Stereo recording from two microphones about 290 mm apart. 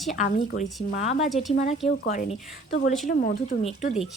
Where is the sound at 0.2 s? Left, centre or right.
Left.